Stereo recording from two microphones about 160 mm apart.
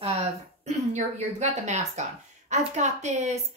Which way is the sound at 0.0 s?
45° right (ahead or behind).